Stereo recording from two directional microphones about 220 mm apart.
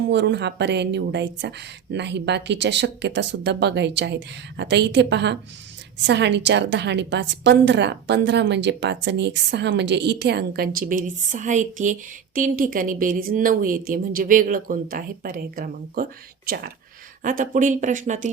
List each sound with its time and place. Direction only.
0.1 s speech: 55° right (ahead or behind); by 18.3 s 35° right (ahead or behind)